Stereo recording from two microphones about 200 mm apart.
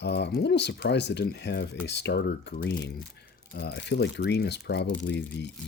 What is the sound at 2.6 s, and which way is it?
Speech, 60° left (ahead or behind).